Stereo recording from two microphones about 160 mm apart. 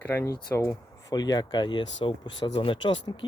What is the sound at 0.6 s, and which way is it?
Speech, 25° left (ahead or behind).